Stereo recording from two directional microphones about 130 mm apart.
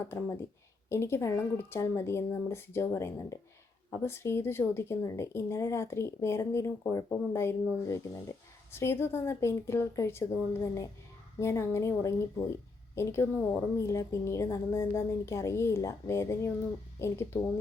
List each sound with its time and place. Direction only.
0.0 s speech: 20° left (ahead or behind)